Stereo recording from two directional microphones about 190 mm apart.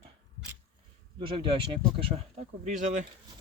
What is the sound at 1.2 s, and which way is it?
Speech, 25° right (ahead or behind).